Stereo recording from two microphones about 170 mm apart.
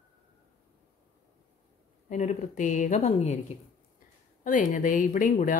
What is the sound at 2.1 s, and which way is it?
Speech, 45° left (ahead or behind).